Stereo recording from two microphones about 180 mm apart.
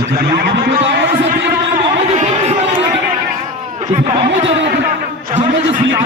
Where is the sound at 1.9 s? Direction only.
40° right (ahead or behind).